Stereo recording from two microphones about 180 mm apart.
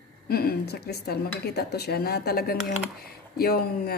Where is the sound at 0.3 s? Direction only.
60° left (ahead or behind).